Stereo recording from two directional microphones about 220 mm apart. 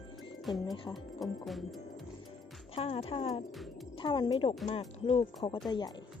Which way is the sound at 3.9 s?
20° left (ahead or behind).